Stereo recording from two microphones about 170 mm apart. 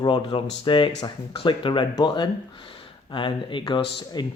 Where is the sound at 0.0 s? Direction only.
30° left (ahead or behind).